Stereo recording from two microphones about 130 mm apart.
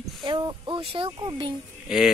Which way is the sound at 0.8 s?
45° right (ahead or behind).